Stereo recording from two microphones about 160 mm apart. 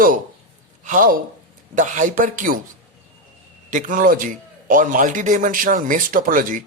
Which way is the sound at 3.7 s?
55° right (ahead or behind).